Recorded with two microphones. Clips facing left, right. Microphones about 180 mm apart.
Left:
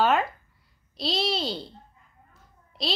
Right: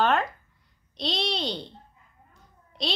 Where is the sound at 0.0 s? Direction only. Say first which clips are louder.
Left 1 dB; 5° left (ahead or behind).